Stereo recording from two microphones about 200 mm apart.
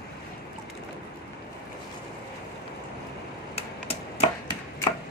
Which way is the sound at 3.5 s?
30° left (ahead or behind).